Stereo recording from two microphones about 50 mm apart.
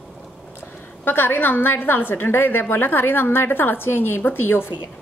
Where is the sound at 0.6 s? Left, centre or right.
Left.